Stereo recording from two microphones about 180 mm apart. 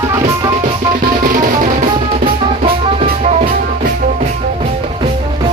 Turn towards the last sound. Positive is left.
turn(degrees=-45)  # may be behind; listen again after turning